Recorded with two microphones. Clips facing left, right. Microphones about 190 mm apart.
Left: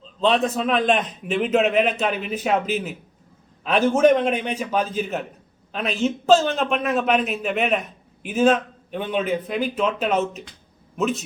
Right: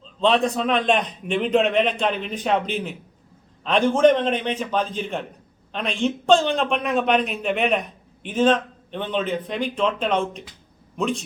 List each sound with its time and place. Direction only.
0.2 s a man's voice: centre (ahead or behind)